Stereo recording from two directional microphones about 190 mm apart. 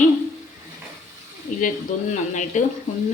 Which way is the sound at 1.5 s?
40° left (ahead or behind).